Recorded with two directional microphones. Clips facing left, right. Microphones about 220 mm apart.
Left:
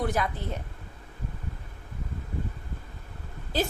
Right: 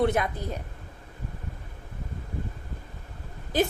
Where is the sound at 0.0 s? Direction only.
25° right (ahead or behind).